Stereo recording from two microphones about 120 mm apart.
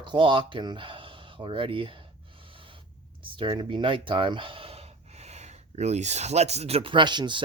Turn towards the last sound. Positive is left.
turn(degrees=-40)  # may be behind; listen again after turning